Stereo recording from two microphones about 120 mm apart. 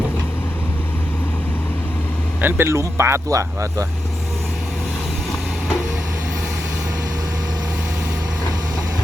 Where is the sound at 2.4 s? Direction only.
20° right (ahead or behind).